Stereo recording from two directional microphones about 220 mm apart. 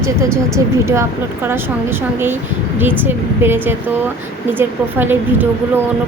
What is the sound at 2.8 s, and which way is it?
Speech, 10° right (ahead or behind).